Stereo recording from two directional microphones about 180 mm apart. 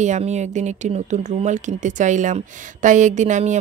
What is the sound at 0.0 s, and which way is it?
Speech, 40° right (ahead or behind).